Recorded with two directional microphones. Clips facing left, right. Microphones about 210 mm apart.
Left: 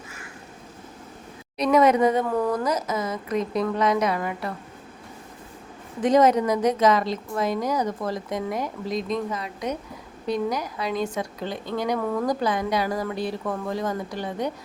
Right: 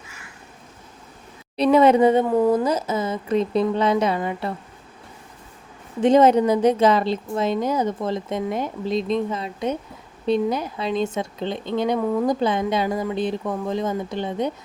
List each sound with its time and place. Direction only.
1.5 s speech: 30° right (ahead or behind)
6.0 s speech: 25° right (ahead or behind)